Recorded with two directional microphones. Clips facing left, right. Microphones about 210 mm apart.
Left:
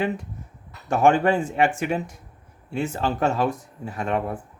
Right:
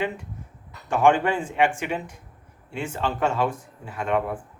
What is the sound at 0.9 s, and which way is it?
Speech, 40° left (ahead or behind).